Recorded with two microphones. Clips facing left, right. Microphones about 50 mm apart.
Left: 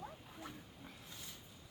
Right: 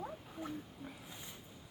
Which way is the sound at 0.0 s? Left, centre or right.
Right.